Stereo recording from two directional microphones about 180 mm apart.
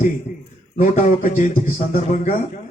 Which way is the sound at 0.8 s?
40° left (ahead or behind).